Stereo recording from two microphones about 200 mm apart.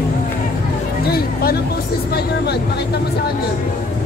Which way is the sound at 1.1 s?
50° left (ahead or behind).